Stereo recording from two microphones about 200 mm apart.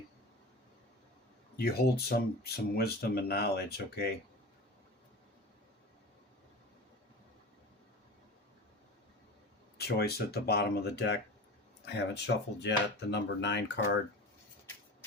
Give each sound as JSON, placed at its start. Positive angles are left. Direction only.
{"t": 1.5, "sound": "speech", "side_deg": 50}
{"t": 9.7, "sound": "speech", "side_deg": 55}